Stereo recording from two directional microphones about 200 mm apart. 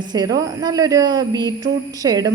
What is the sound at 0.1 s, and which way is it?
A woman's voice, 20° right (ahead or behind).